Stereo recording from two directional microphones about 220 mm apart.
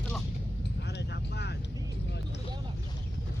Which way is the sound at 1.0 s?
50° left (ahead or behind).